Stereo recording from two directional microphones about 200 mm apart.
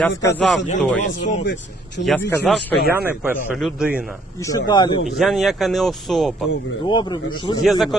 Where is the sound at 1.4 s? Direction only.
60° left (ahead or behind).